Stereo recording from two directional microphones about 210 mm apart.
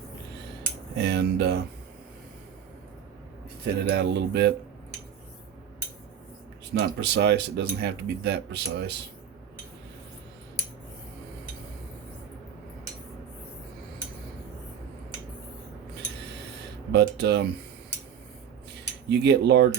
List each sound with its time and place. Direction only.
0.9 s speech: 50° right (ahead or behind)
3.6 s speech: 55° right (ahead or behind)
6.7 s speech: 55° right (ahead or behind)
16.9 s speech: 50° right (ahead or behind)
19.0 s speech: 55° right (ahead or behind)